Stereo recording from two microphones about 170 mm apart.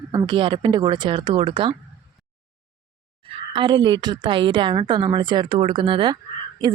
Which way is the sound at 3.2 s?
30° right (ahead or behind).